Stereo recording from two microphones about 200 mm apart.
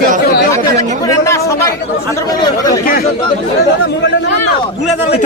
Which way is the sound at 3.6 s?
55° left (ahead or behind).